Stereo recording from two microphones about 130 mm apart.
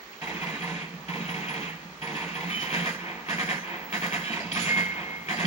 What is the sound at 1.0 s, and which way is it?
Vehicle, 55° left (ahead or behind).